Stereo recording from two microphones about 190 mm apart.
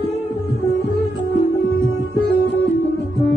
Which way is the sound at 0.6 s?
65° left (ahead or behind).